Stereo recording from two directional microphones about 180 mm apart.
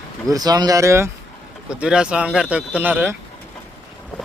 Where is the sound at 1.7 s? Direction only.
5° right (ahead or behind).